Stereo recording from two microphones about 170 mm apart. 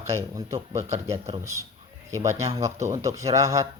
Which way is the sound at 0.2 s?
20° right (ahead or behind).